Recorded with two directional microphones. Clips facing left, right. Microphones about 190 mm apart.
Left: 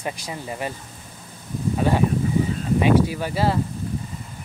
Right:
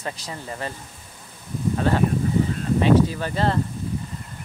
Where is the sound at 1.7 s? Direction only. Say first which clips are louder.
Left 1 dB; 10° left (ahead or behind).